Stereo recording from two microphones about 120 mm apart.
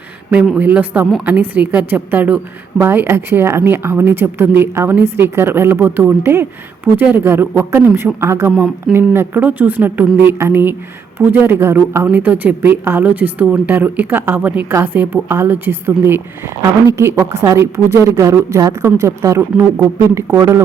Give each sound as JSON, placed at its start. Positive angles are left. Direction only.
{"t": 0.3, "sound": "a woman's voice", "side_deg": -10}